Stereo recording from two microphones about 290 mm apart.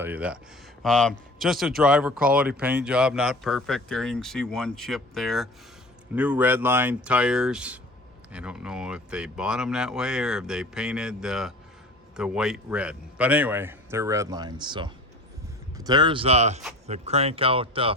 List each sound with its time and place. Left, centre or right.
0.0 s a man's voice: centre